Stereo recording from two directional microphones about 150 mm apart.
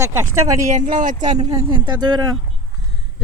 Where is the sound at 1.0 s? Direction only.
55° right (ahead or behind).